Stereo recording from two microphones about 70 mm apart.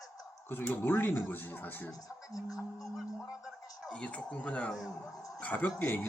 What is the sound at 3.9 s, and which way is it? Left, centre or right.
Speech, centre.